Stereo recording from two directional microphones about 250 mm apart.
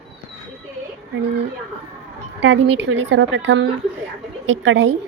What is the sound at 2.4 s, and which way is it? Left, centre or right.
A woman's voice, right.